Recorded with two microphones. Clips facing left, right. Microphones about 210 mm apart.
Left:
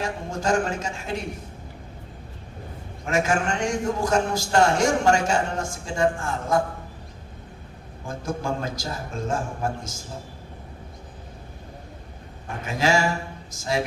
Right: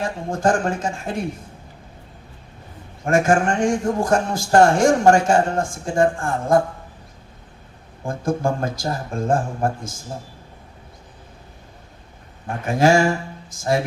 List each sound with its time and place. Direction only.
0.0 s a man's voice: 55° right (ahead or behind)
3.1 s a man's voice: 50° right (ahead or behind)
8.0 s a man's voice: 55° right (ahead or behind)
12.6 s a man's voice: 50° right (ahead or behind)